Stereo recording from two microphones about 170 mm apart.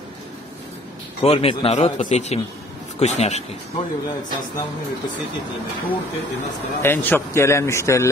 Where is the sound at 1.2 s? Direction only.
35° left (ahead or behind).